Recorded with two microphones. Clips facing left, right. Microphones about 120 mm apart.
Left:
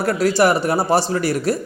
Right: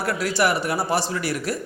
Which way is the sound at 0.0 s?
35° left (ahead or behind).